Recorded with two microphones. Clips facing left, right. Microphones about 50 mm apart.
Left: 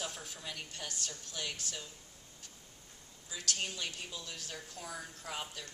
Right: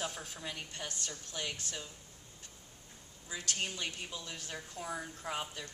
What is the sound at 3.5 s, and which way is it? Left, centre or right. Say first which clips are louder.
Speech: right 4 dB; centre.